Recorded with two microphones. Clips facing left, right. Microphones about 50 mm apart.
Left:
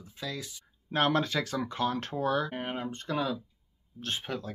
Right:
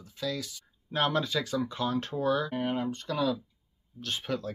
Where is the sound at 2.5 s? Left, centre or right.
Left.